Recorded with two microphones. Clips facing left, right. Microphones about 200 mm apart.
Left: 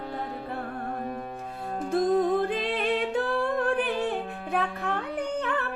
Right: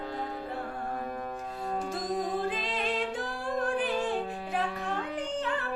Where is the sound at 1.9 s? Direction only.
60° left (ahead or behind).